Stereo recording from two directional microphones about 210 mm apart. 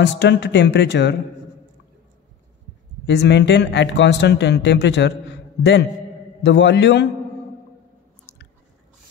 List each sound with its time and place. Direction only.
0.0 s speech: 55° left (ahead or behind)
3.1 s speech: 55° left (ahead or behind)